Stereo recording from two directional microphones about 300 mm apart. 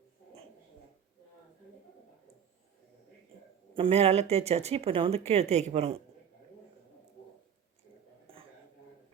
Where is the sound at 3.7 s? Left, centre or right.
Centre.